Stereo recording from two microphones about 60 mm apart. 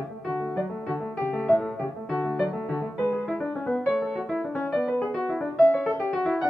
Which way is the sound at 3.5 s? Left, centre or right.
Left.